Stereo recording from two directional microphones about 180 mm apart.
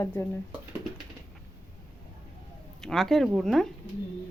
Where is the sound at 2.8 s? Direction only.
Centre (ahead or behind).